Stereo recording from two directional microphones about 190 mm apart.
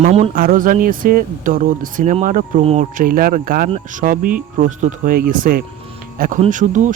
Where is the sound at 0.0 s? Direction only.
35° right (ahead or behind).